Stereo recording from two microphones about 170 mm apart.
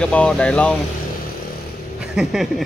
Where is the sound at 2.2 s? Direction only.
Centre (ahead or behind).